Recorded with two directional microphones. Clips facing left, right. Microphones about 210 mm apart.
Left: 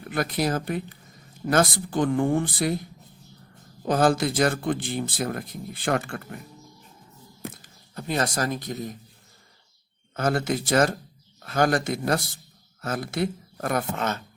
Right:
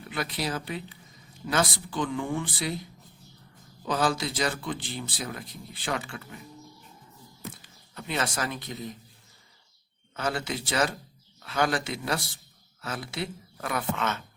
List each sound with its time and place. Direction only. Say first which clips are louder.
0.1 s speech: left 6 dB; 50° left (ahead or behind)
3.8 s speech: left 6 dB; 50° left (ahead or behind)
7.5 s speech: left 5 dB; 45° left (ahead or behind)
10.2 s speech: left 6 dB; 45° left (ahead or behind)